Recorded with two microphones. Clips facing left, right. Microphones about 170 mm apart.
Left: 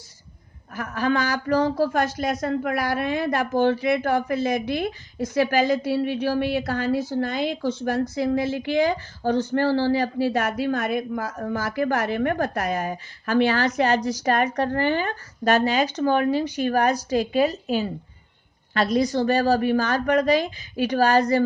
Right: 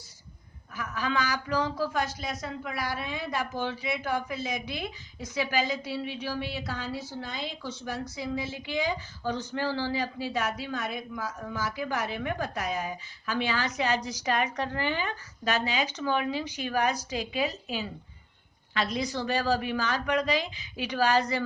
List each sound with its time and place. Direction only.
0.8 s a woman's voice: 55° left (ahead or behind)